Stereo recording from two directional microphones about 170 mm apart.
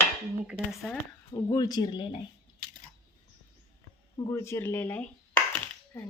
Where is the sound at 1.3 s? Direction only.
25° left (ahead or behind).